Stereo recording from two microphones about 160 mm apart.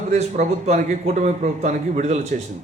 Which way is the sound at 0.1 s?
45° right (ahead or behind).